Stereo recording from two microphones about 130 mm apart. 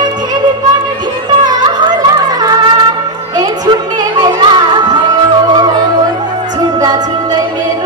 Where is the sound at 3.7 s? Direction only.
35° right (ahead or behind).